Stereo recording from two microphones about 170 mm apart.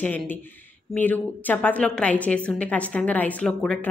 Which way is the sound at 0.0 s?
10° left (ahead or behind).